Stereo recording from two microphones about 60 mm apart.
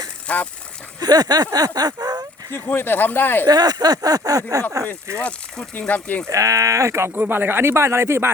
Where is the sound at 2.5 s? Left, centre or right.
Left.